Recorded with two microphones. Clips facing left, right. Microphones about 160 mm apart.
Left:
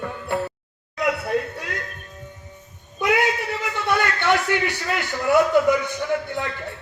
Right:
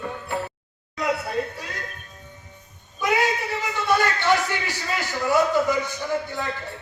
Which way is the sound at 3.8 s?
60° left (ahead or behind).